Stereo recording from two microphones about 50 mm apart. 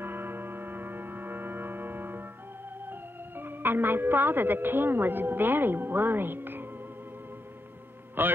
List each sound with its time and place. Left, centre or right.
0.0 s music: right
2.9 s speech: right
8.2 s a man's voice: right